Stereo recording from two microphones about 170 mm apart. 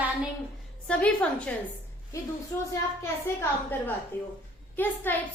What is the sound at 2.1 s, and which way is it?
A woman's voice, 20° left (ahead or behind).